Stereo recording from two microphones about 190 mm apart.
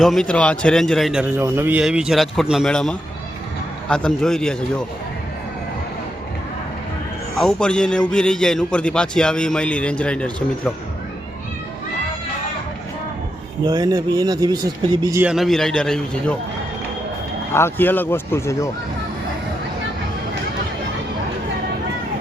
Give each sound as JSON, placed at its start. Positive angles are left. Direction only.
{"t": 0.0, "sound": "a man's voice", "side_deg": 0}
{"t": 7.3, "sound": "a man's voice", "side_deg": 5}
{"t": 13.7, "sound": "speech", "side_deg": -20}
{"t": 15.2, "sound": "a man's voice", "side_deg": 0}
{"t": 17.5, "sound": "speech", "side_deg": 10}